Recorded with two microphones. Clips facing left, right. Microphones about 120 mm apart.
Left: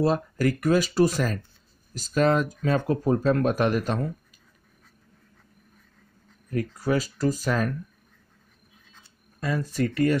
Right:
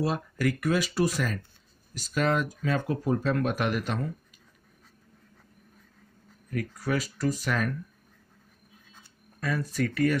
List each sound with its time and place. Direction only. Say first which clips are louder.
0.0 s speech: left 5 dB; 35° left (ahead or behind)
6.5 s speech: left 4 dB; 30° left (ahead or behind)
9.4 s speech: left 3 dB; 25° left (ahead or behind)